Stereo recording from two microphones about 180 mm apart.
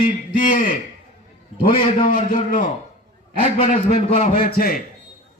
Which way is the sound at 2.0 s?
50° left (ahead or behind).